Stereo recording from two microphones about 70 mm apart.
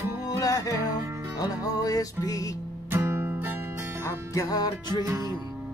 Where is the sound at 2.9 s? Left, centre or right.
Right.